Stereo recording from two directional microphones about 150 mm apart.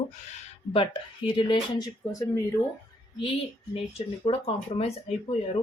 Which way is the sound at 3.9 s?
40° left (ahead or behind).